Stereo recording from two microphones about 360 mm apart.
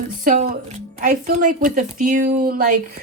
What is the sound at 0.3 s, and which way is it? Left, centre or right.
A woman's voice, right.